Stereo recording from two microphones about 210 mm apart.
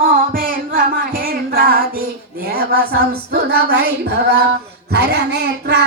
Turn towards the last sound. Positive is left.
turn(degrees=-50)  # may be behind; listen again after turning